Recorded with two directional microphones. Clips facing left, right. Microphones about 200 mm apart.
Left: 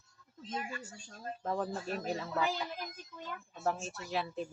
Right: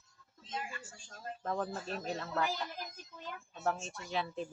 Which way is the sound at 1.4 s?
5° left (ahead or behind).